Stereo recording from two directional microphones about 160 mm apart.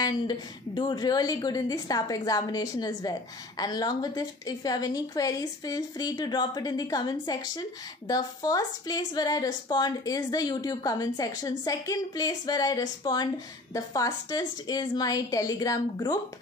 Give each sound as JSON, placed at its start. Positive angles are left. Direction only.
{"t": 0.0, "sound": "a woman's voice", "side_deg": 25}